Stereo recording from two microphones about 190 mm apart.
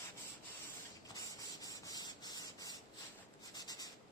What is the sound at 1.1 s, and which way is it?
Rub, 20° left (ahead or behind).